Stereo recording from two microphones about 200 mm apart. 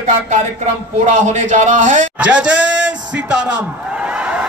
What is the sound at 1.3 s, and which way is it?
Speech, 35° right (ahead or behind).